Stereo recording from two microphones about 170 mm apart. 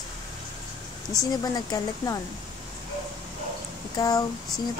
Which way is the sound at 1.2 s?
20° left (ahead or behind).